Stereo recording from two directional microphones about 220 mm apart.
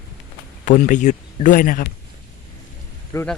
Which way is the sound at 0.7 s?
35° left (ahead or behind).